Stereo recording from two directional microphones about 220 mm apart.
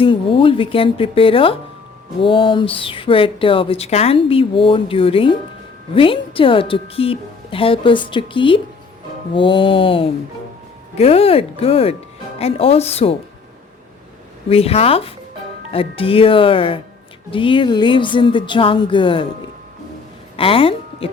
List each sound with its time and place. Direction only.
0.0 s speech: 25° left (ahead or behind)
14.5 s speech: 25° left (ahead or behind)
20.3 s speech: 25° left (ahead or behind)